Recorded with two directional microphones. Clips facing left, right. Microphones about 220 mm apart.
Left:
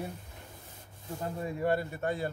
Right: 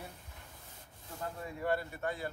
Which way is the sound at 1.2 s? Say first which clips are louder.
Left 6 dB; 20° left (ahead or behind).